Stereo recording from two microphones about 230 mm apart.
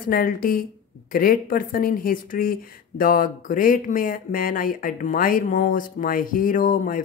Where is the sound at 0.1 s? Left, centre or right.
Left.